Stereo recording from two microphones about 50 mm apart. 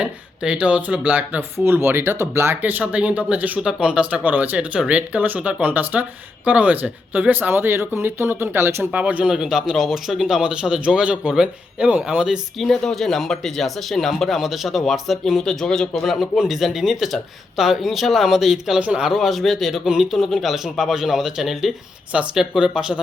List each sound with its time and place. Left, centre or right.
0.0 s speech: right
1.4 s speech: right
2.1 s speech: right
2.6 s speech: right
3.6 s speech: centre; by 8.7 s right
8.9 s speech: right
9.3 s speech: centre
12.7 s a man's voice: centre
18.8 s speech: right
19.0 s a man's voice: centre